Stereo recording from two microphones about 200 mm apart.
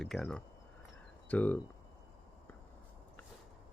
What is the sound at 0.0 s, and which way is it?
Speech, centre (ahead or behind).